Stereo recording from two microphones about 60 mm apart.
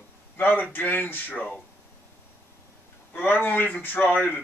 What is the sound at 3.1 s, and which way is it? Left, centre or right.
A man's voice, left.